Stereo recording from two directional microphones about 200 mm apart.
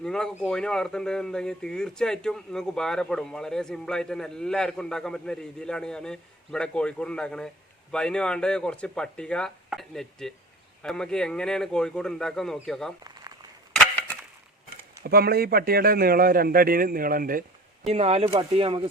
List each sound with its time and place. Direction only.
0.0 s speech: 5° left (ahead or behind)
13.1 s crumpling: 20° right (ahead or behind)
13.7 s wood: 10° left (ahead or behind)
15.0 s a man's voice: 50° right (ahead or behind)
17.8 s speech: 30° right (ahead or behind)